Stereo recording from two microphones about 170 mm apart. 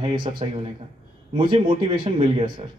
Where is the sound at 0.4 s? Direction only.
35° right (ahead or behind).